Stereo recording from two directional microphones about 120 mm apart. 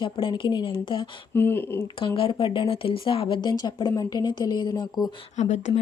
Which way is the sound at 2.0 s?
45° left (ahead or behind).